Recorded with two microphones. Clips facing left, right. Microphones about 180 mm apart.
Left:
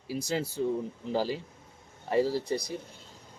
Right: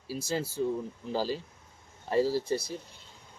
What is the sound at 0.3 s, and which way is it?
Speech, 20° left (ahead or behind).